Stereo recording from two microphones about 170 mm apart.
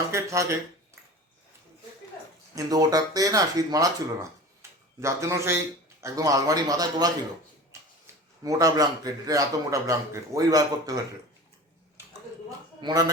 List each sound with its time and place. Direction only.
0.1 s a man's voice: 15° right (ahead or behind)
2.6 s a man's voice: 20° right (ahead or behind)
8.4 s a man's voice: 20° right (ahead or behind)
12.5 s a man's voice: 20° right (ahead or behind)